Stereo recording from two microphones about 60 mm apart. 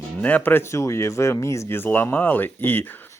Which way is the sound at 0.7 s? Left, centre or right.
Left.